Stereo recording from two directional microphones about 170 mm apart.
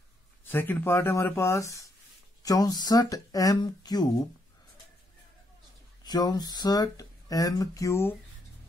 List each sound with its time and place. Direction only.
0.5 s speech: 10° left (ahead or behind)
6.0 s speech: 25° left (ahead or behind)